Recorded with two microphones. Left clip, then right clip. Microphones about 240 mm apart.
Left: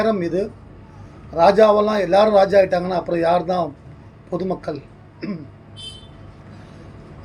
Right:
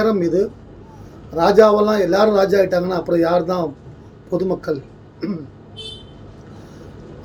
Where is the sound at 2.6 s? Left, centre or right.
Centre.